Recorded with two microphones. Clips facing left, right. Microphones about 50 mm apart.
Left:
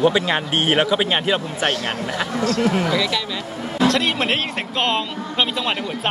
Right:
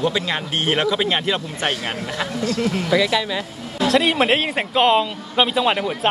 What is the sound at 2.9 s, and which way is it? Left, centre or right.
Speech, centre.